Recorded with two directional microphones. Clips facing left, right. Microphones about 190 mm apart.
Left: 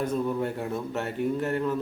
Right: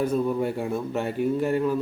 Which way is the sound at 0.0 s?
10° right (ahead or behind).